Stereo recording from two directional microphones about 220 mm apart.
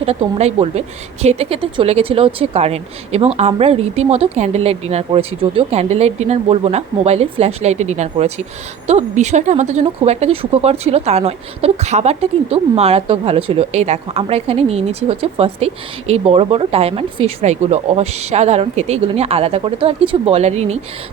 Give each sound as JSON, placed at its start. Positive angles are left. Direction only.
{"t": 0.0, "sound": "speech", "side_deg": -30}